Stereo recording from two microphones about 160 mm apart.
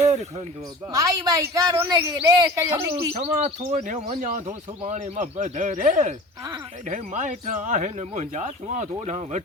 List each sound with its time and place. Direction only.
0.1 s speech: 45° right (ahead or behind)
0.9 s a man's voice: 20° right (ahead or behind)
3.2 s speech: 45° right (ahead or behind)